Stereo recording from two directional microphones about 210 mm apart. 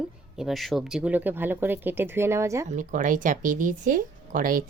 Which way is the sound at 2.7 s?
35° right (ahead or behind).